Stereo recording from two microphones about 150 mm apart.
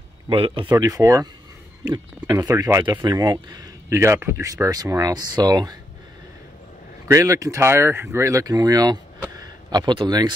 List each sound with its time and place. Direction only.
0.3 s speech: 35° right (ahead or behind)
0.7 s speech: 25° right (ahead or behind)
7.1 s speech: 20° right (ahead or behind)